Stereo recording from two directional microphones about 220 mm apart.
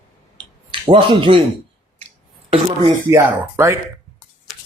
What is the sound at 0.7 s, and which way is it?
Speech, 20° right (ahead or behind).